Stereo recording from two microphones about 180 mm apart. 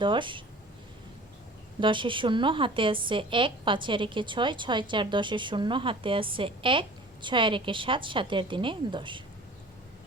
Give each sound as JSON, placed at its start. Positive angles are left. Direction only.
{"t": 0.0, "sound": "a woman's voice", "side_deg": -25}
{"t": 1.8, "sound": "a woman's voice", "side_deg": -25}